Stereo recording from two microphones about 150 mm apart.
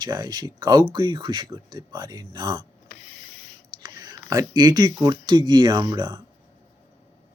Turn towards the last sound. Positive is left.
turn(degrees=-30)  # may be behind; listen again after turning